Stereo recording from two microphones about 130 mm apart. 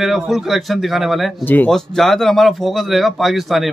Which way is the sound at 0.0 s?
Centre (ahead or behind).